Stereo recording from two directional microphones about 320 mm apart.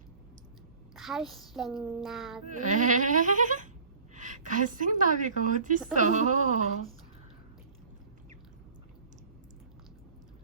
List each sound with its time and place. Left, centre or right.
0.9 s speech: centre
2.6 s bleat: right
4.1 s a woman's voice: right
6.0 s bleat: right